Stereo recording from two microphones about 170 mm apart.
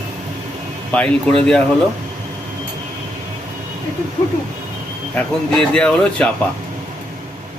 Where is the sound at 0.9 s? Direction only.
10° left (ahead or behind).